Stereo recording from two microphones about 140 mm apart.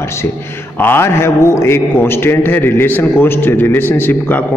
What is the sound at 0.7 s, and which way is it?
A man's voice, 15° left (ahead or behind).